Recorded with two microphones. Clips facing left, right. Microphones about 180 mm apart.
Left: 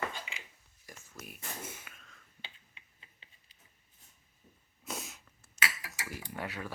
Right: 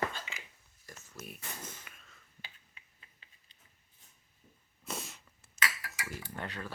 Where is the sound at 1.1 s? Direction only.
Centre (ahead or behind).